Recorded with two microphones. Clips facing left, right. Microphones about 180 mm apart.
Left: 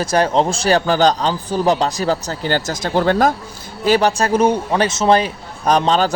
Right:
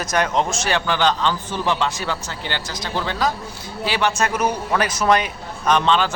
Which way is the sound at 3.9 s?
40° left (ahead or behind).